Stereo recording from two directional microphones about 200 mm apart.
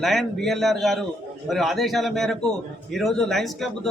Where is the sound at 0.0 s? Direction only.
Centre (ahead or behind).